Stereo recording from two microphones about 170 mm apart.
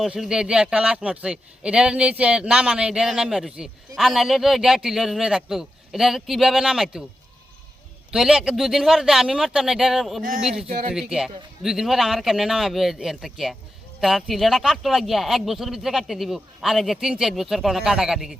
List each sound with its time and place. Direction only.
0.0 s speech: 5° right (ahead or behind)
8.1 s speech: centre (ahead or behind)
10.7 s speech: 55° right (ahead or behind)
10.9 s speech: 5° right (ahead or behind)